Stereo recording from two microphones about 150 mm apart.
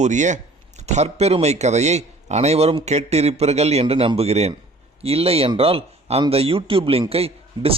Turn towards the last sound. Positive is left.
turn(degrees=-40)  # may be behind; listen again after turning